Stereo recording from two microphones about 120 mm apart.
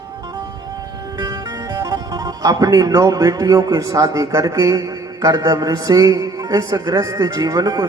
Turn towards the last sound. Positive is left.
turn(degrees=-30)  # may be behind; listen again after turning